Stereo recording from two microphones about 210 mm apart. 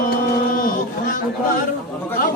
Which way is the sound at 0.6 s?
40° left (ahead or behind).